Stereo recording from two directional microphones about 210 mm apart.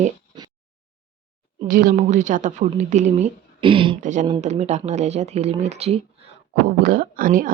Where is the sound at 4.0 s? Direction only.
35° right (ahead or behind).